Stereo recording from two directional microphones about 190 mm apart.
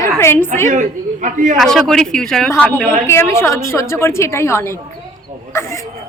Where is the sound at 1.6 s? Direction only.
Centre (ahead or behind).